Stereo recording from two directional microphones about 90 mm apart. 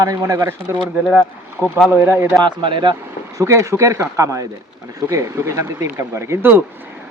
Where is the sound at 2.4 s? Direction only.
65° right (ahead or behind).